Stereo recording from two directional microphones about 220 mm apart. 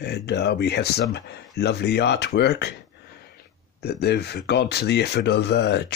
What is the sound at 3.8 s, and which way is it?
Speech, 45° left (ahead or behind).